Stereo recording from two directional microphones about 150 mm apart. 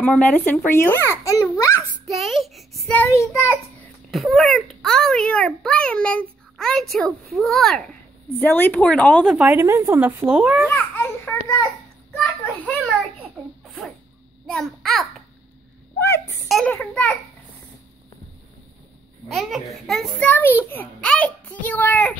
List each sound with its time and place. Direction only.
0.0 s a child's voice: 10° left (ahead or behind)
2.0 s child singing: centre (ahead or behind)
3.0 s a child's voice: 15° left (ahead or behind)
4.1 s a child's voice: centre (ahead or behind)
8.4 s a child's voice: 10° left (ahead or behind)
9.3 s speech: 10° right (ahead or behind)
10.7 s a child's voice: 10° left (ahead or behind)
13.4 s a child's voice: 5° right (ahead or behind)
16.0 s a sound: 15° left (ahead or behind)
16.4 s a child's voice: 5° left (ahead or behind)
19.2 s a child's voice: centre (ahead or behind)
20.2 s a child's voice: 15° left (ahead or behind)